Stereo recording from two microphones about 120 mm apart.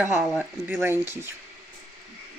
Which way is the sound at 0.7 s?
20° right (ahead or behind).